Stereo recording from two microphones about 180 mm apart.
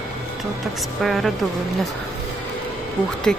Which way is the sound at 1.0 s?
Centre (ahead or behind).